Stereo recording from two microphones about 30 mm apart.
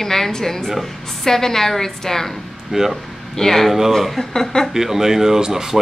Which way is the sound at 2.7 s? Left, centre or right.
Centre.